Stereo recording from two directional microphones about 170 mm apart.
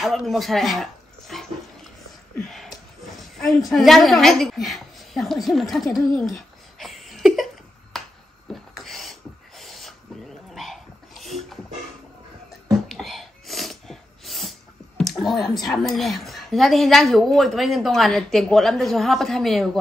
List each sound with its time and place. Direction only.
0.0 s speech: centre (ahead or behind)
2.4 s a woman's voice: centre (ahead or behind)
6.1 s a sound: centre (ahead or behind)
10.5 s dog: centre (ahead or behind)
12.6 s sneeze: centre (ahead or behind)
15.4 s a woman's voice: centre (ahead or behind)